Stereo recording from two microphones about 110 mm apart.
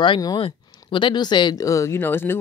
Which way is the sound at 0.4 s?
50° left (ahead or behind).